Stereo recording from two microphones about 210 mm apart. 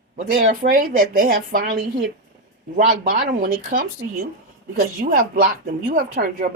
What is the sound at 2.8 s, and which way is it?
A woman's voice, 40° right (ahead or behind).